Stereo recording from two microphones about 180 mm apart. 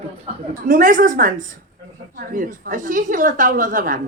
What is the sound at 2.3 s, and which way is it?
A woman's voice, 45° right (ahead or behind).